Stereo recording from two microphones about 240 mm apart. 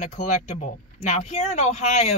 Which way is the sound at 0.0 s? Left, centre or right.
Left.